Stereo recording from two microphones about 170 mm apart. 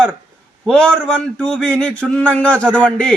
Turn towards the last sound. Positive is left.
turn(degrees=5)  # may be behind; listen again after turning